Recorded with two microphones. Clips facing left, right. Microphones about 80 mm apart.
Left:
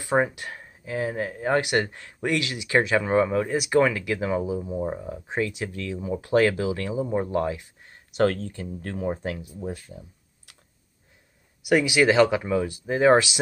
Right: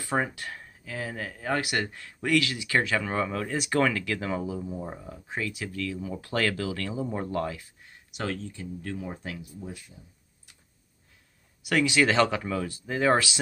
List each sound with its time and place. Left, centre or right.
0.0 s speech: centre
7.8 s speech: left
9.9 s computer keyboard: left
11.6 s speech: centre